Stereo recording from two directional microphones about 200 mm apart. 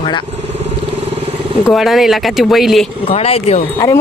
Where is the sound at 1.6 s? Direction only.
Centre (ahead or behind).